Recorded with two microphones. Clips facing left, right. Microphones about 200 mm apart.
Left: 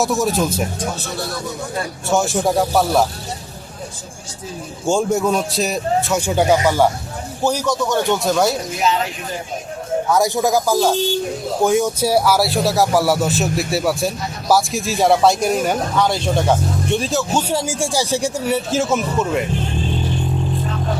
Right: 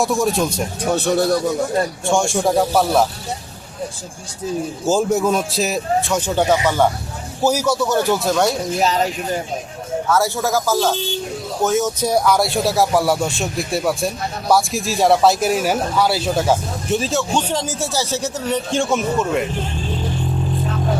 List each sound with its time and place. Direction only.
0.0 s speech: centre (ahead or behind)
0.8 s speech: 60° right (ahead or behind)
2.0 s speech: 5° left (ahead or behind)
4.9 s speech: centre (ahead or behind)
7.4 s speech: 5° right (ahead or behind)
8.8 s speech: 40° right (ahead or behind)
10.1 s speech: 15° left (ahead or behind); by 19.5 s centre (ahead or behind)